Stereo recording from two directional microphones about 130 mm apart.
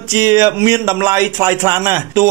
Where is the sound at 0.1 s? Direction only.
25° right (ahead or behind).